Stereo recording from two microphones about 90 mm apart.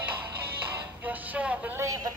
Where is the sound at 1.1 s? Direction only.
20° right (ahead or behind).